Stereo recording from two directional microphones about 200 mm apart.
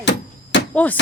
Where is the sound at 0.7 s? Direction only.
5° left (ahead or behind).